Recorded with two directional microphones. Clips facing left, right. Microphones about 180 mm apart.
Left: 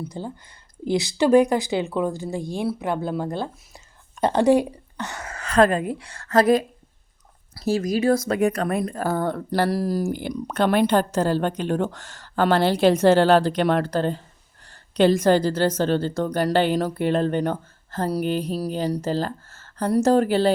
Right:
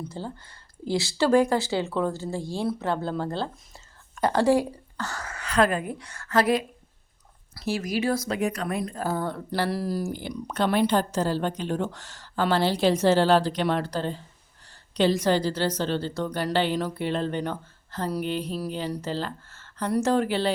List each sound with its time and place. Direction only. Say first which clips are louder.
0.0 s speech: left 3 dB; 15° left (ahead or behind)
5.3 s a sound: left 5 dB; 40° left (ahead or behind)
5.8 s a woman's voice: left 6 dB; 25° left (ahead or behind); by 20.5 s 40° left (ahead or behind)